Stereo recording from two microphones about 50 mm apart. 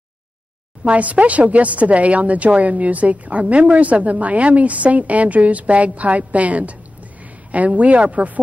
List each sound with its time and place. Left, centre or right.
0.8 s speech: right